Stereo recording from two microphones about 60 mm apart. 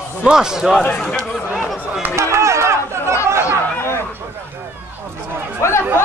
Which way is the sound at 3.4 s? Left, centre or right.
Left.